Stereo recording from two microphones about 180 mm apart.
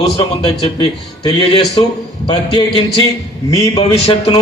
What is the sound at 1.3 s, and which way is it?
A man's voice, 25° left (ahead or behind).